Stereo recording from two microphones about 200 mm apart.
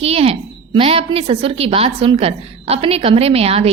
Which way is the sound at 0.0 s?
30° right (ahead or behind).